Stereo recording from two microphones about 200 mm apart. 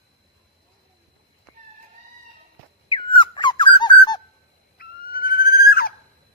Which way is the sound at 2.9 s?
25° left (ahead or behind).